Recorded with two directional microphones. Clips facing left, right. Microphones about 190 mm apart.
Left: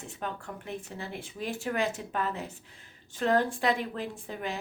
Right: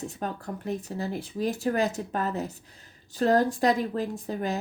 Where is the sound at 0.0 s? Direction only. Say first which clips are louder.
Right 4 dB; 40° right (ahead or behind).